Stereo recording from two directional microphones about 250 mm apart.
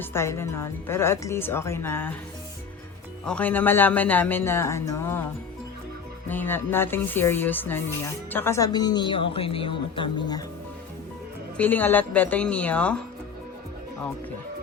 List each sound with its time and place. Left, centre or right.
0.0 s speech: centre
3.2 s speech: centre
6.2 s speech: centre
11.5 s speech: centre